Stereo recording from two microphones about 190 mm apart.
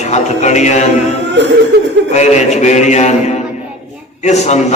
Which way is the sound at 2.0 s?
35° left (ahead or behind).